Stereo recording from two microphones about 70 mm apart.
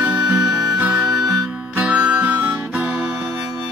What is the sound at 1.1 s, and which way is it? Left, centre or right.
Music, centre.